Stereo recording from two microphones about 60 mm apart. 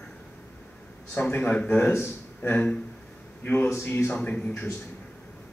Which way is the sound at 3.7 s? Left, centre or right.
Left.